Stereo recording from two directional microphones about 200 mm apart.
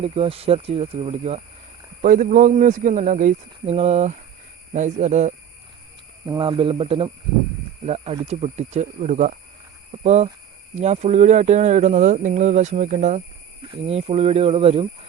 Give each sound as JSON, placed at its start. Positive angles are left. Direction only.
{"t": 0.0, "sound": "speech", "side_deg": -30}
{"t": 2.0, "sound": "speech", "side_deg": -40}
{"t": 6.2, "sound": "speech", "side_deg": -25}